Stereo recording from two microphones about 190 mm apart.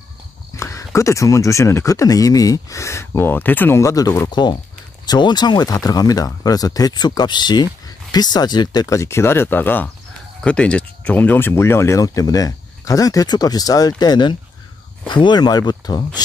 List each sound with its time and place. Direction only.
0.6 s speech: 15° left (ahead or behind)